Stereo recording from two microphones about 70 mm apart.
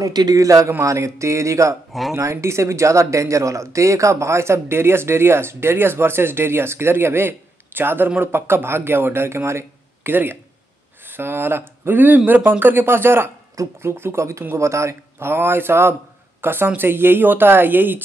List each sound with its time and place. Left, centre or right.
0.0 s a man's voice: right
0.4 s speech: right
1.9 s speech: centre
2.1 s speech: right